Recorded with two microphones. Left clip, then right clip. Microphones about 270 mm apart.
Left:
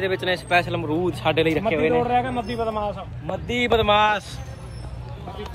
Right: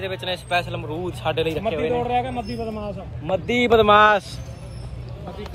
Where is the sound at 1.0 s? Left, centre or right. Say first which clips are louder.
Left 2 dB; left.